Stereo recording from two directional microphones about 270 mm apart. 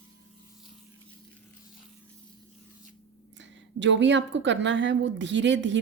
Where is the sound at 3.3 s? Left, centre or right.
Right.